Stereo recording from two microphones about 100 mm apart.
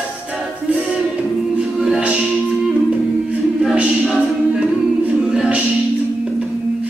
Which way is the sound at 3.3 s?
10° right (ahead or behind).